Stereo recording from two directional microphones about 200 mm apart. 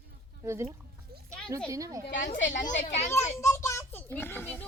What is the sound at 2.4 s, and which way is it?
Speech, 40° left (ahead or behind).